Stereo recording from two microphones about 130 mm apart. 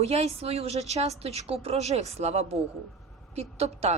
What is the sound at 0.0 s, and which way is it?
A woman's voice, 50° right (ahead or behind).